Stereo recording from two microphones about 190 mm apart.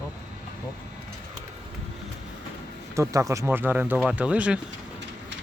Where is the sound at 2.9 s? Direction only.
15° right (ahead or behind).